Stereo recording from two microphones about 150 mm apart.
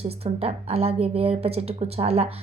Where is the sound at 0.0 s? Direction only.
45° right (ahead or behind).